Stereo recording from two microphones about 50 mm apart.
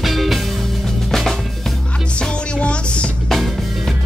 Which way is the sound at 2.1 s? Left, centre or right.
Left.